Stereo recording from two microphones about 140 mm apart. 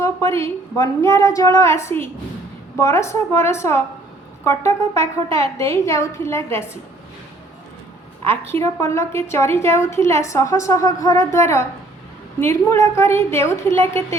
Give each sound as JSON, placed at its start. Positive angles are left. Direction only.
{"t": 0.0, "sound": "a woman's voice", "side_deg": 20}
{"t": 8.3, "sound": "a woman's voice", "side_deg": 20}